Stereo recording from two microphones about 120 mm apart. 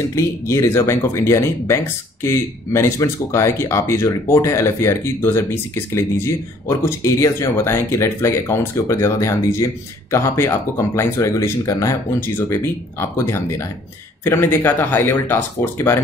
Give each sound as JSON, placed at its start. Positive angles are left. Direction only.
{"t": 0.1, "sound": "speech", "side_deg": 25}